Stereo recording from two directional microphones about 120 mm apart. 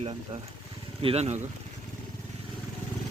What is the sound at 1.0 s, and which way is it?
Speech, 65° right (ahead or behind).